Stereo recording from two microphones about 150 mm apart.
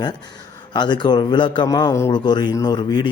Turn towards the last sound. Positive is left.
turn(degrees=30)  # may be behind; listen again after turning